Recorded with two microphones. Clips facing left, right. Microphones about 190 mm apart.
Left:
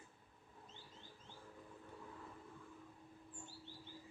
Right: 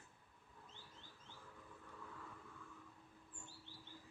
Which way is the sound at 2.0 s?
25° left (ahead or behind).